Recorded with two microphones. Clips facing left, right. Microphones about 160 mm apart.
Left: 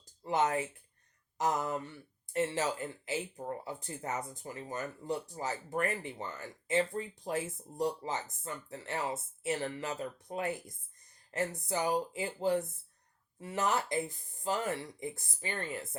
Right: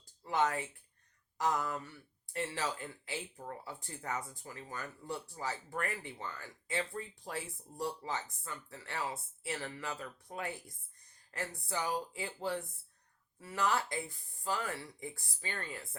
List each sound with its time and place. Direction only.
0.2 s speech: 20° left (ahead or behind)